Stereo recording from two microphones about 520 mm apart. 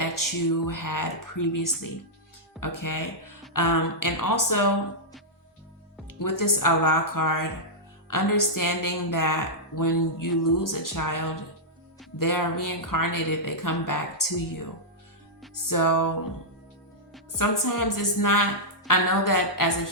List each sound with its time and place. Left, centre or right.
0.0 s a woman's voice: left
6.1 s a woman's voice: left
15.7 s a woman's voice: left
17.3 s a woman's voice: left